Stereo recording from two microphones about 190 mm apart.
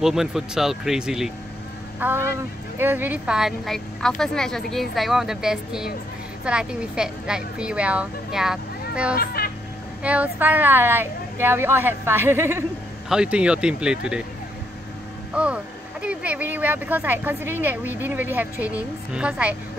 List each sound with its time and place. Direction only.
0.0 s a woman's voice: centre (ahead or behind)
9.1 s a child's voice: 55° left (ahead or behind)
10.0 s a woman's voice: 5° right (ahead or behind)
15.3 s speech: 5° right (ahead or behind)